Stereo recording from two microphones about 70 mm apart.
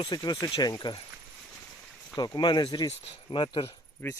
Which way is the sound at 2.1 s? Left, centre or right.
Left.